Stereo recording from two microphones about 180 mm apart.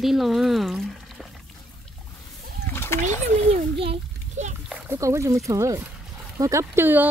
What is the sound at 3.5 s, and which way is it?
A child's voice, 35° right (ahead or behind).